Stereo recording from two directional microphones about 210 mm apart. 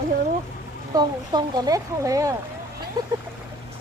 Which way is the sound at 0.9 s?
20° right (ahead or behind).